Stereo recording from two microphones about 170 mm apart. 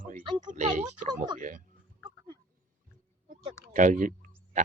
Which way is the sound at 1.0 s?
25° right (ahead or behind).